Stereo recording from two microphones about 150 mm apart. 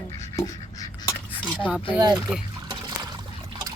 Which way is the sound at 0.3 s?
25° left (ahead or behind).